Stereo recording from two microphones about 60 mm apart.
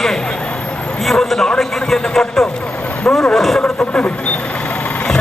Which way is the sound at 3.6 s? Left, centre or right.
Left.